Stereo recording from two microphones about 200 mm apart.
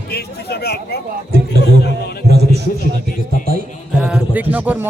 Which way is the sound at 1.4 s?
60° left (ahead or behind).